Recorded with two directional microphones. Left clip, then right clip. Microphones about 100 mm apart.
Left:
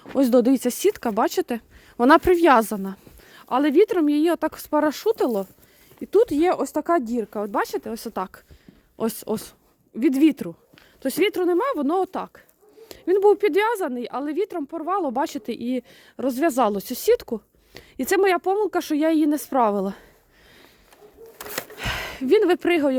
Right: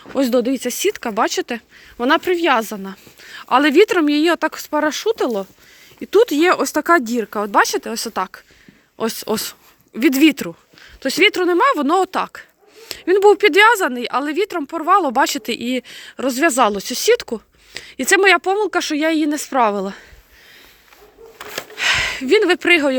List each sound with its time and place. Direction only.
0.2 s speech: 65° left (ahead or behind)
2.7 s speech: 50° left (ahead or behind)
3.4 s speech: 15° left (ahead or behind)
4.5 s speech: 45° left (ahead or behind)
6.0 s speech: 15° left (ahead or behind)
9.0 s speech: 40° left (ahead or behind)
9.3 s speech: 5° left (ahead or behind)
11.0 s a woman's voice: 30° left (ahead or behind)
11.5 s a woman's voice: 15° left (ahead or behind); by 20.1 s 45° left (ahead or behind)
21.8 s speech: 50° left (ahead or behind)